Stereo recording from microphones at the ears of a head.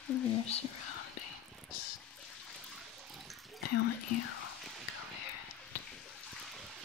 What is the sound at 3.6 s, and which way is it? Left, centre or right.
Whispering, left.